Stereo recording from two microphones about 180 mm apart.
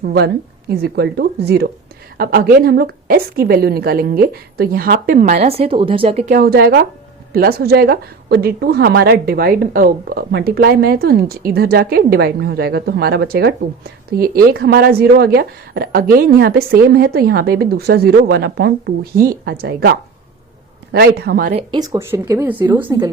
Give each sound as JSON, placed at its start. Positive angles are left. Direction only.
{"t": 0.7, "sound": "a woman's voice", "side_deg": -65}
{"t": 6.3, "sound": "a woman's voice", "side_deg": -55}
{"t": 21.5, "sound": "speech", "side_deg": -25}